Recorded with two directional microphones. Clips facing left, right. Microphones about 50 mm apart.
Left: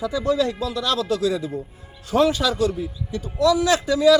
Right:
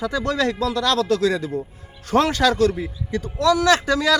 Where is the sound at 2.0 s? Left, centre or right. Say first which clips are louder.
Right 1 dB; right.